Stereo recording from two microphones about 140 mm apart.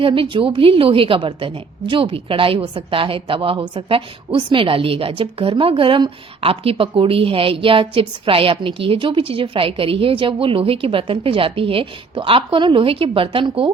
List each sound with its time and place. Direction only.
0.0 s a woman's voice: 40° right (ahead or behind)